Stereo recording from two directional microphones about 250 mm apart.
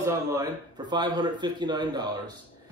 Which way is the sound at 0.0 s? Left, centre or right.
Centre.